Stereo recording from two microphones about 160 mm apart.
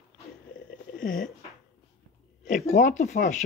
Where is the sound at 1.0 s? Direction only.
55° left (ahead or behind).